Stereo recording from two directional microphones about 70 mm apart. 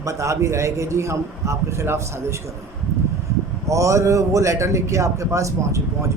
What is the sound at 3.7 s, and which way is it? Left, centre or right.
A man's voice, right.